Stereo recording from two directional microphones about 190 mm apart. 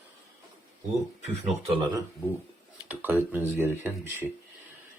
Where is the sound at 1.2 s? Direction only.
30° right (ahead or behind).